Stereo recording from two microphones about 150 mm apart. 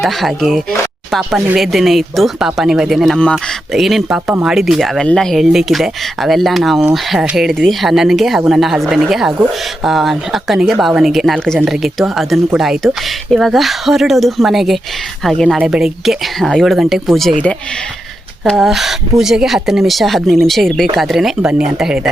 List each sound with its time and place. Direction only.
0.0 s speech: centre (ahead or behind)
18.4 s speech: centre (ahead or behind)